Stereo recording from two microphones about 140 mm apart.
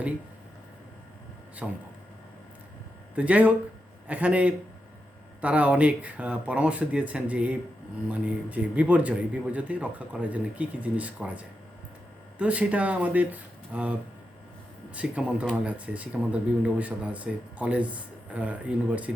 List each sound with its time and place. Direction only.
1.6 s speech: 5° right (ahead or behind)
3.2 s speech: 10° right (ahead or behind)